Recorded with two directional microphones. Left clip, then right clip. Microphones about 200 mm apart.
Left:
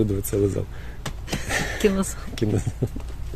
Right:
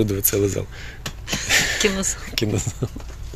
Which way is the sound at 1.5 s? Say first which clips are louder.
Right 8 dB; 15° left (ahead or behind).